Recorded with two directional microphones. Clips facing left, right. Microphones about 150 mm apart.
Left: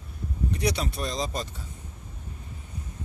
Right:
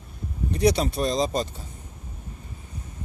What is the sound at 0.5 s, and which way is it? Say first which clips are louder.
Speech: right 8 dB; 30° right (ahead or behind).